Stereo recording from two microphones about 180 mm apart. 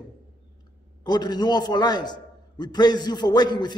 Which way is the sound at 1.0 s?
20° left (ahead or behind).